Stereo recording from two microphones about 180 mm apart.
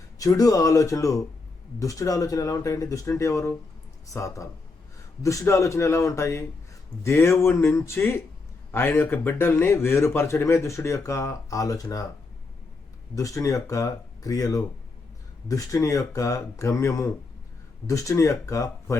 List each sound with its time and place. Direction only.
0.2 s a man's voice: 20° left (ahead or behind)
13.1 s a man's voice: 20° left (ahead or behind)